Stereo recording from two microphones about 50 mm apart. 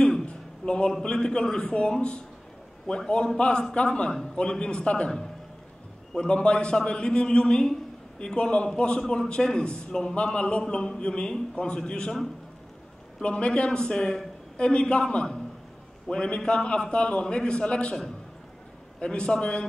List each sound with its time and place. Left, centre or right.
0.0 s a sound: centre
1.0 s a man's voice: centre
6.1 s a man's voice: left
13.2 s a man's voice: left